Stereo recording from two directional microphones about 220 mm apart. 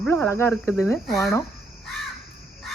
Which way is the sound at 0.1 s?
10° left (ahead or behind).